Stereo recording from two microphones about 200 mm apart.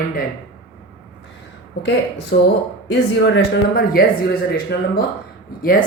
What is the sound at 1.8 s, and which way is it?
Speech, 60° left (ahead or behind).